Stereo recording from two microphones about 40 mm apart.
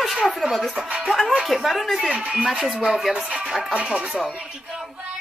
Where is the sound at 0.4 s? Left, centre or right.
Centre.